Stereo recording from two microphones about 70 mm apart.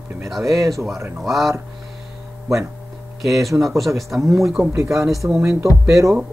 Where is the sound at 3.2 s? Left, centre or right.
Centre.